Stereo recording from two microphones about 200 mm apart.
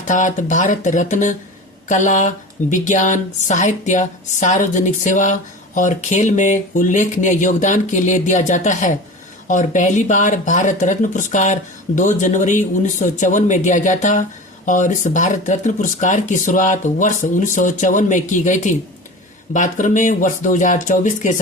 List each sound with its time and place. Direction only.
0.1 s speech: 40° left (ahead or behind)